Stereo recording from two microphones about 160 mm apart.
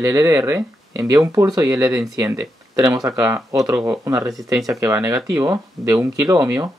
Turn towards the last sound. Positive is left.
turn(degrees=-20)  # may be behind; listen again after turning